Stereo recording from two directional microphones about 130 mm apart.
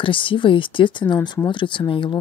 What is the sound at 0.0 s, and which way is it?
Speech, 40° left (ahead or behind).